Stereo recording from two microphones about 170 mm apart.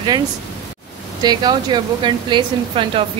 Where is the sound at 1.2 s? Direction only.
25° right (ahead or behind).